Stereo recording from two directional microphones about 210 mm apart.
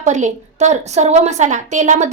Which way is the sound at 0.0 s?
35° right (ahead or behind).